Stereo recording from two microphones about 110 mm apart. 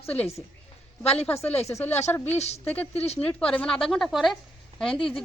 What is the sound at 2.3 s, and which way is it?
Speech, 80° left.